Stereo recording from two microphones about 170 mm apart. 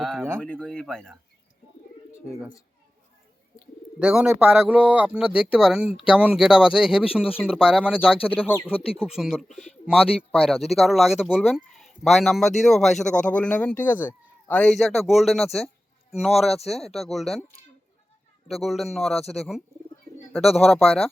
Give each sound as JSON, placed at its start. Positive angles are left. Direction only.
{"t": 0.0, "sound": "a sound", "side_deg": 0}
{"t": 0.3, "sound": "speech", "side_deg": 10}
{"t": 4.0, "sound": "speech", "side_deg": -5}
{"t": 8.4, "sound": "speech", "side_deg": 10}
{"t": 8.7, "sound": "speech", "side_deg": 35}
{"t": 9.0, "sound": "speech", "side_deg": -5}
{"t": 16.5, "sound": "speech", "side_deg": 40}
{"t": 16.9, "sound": "speech", "side_deg": 0}
{"t": 18.4, "sound": "speech", "side_deg": 0}